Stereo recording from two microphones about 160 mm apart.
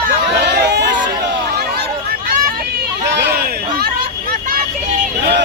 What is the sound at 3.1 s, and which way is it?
Vehicle, 90° right.